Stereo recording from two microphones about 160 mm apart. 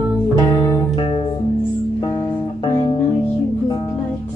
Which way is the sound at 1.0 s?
35° left (ahead or behind).